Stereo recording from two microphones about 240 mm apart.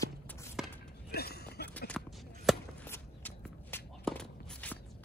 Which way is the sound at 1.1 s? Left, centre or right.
Left.